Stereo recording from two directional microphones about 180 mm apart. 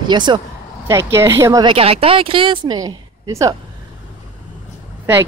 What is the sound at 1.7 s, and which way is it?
Speech, 30° right (ahead or behind).